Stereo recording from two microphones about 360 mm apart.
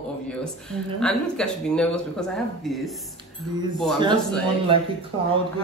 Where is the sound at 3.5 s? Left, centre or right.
Centre.